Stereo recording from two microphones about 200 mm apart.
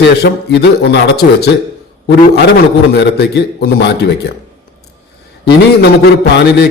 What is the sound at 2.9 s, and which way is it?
A man's voice, 55° left (ahead or behind).